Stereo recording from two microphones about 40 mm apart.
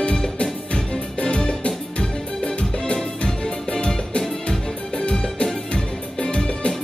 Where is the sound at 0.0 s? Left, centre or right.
Left.